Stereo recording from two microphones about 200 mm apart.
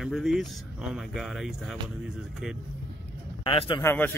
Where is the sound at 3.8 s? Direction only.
10° left (ahead or behind).